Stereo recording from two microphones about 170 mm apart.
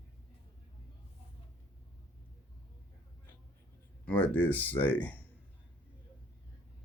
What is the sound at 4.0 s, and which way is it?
Speech, 10° left (ahead or behind).